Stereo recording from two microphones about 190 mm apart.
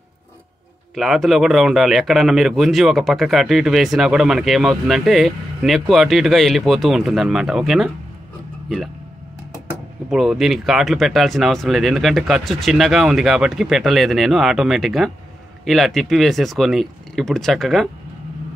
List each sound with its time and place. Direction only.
0.9 s a man's voice: centre (ahead or behind)
10.0 s a man's voice: centre (ahead or behind)